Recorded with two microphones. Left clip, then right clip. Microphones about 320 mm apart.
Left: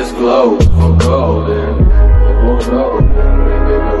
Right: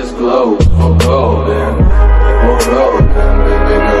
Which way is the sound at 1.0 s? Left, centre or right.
Centre.